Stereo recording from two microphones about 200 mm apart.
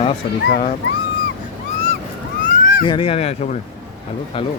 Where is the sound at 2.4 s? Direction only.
40° left (ahead or behind).